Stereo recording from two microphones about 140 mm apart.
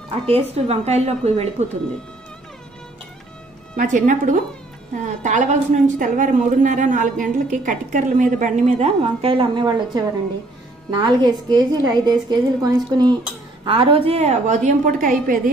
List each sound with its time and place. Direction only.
0.3 s a woman's voice: 50° right (ahead or behind)
3.7 s speech: 65° right (ahead or behind)
8.7 s a woman's voice: 45° right (ahead or behind); by 13.1 s 30° right (ahead or behind)
13.7 s speech: 40° right (ahead or behind); by 15.5 s 85° right